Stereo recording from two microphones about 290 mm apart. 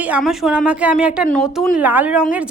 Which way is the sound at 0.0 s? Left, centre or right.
Centre.